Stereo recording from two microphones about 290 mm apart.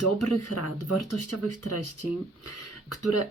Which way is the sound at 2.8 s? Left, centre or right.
Left.